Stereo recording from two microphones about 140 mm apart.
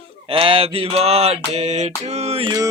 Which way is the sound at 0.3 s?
40° right (ahead or behind).